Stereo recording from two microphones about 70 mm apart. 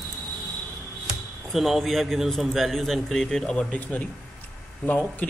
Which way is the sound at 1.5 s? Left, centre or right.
Centre.